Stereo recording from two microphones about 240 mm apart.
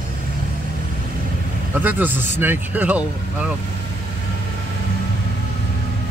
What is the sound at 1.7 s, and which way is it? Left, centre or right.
Speech, centre.